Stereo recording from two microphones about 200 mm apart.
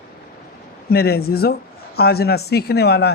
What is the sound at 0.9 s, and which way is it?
Speech, 50° left (ahead or behind).